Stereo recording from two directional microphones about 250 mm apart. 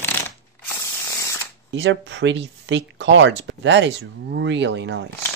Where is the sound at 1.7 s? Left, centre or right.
Right.